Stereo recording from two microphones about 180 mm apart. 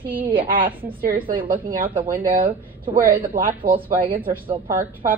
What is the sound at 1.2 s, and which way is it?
A woman's voice, 50° right (ahead or behind).